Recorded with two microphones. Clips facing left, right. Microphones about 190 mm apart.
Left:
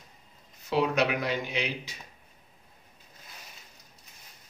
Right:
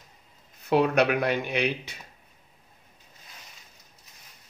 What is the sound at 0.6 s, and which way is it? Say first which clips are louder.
Speech: right 4 dB; 55° right (ahead or behind).